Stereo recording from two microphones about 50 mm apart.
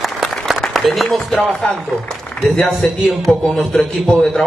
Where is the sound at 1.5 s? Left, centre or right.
Centre.